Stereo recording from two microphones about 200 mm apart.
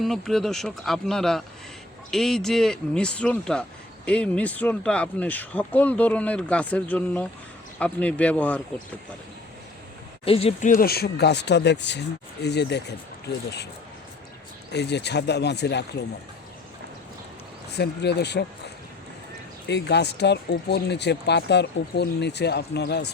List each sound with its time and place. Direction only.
0.0 s speech: centre (ahead or behind)
10.2 s speech: 30° left (ahead or behind); by 13.0 s 55° left (ahead or behind)
14.7 s speech: 55° left (ahead or behind)
17.7 s speech: 55° left (ahead or behind)